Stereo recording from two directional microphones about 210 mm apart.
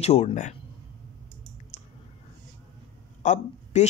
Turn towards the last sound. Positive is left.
turn(degrees=35)  # may be behind; listen again after turning